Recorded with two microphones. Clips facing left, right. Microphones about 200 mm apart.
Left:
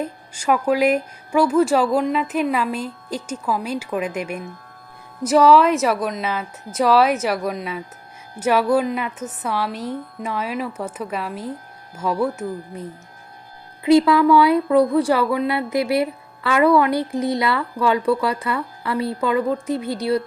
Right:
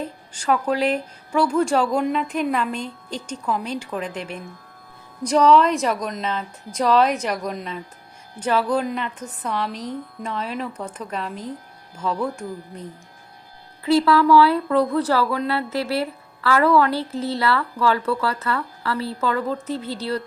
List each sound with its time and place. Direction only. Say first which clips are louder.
0.0 s a woman's voice: left 3 dB; 10° left (ahead or behind)
13.8 s speech: left 3 dB; 20° left (ahead or behind)